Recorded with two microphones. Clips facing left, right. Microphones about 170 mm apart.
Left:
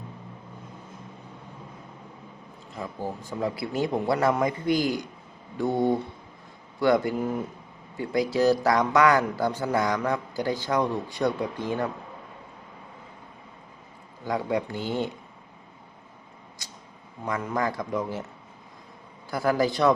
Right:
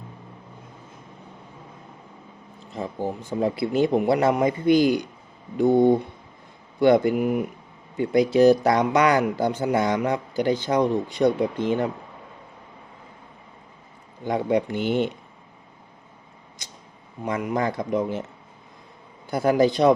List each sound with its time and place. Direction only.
2.7 s a man's voice: 25° right (ahead or behind)
14.3 s a man's voice: 20° right (ahead or behind)
17.2 s a man's voice: 20° right (ahead or behind)
19.3 s a man's voice: 20° right (ahead or behind)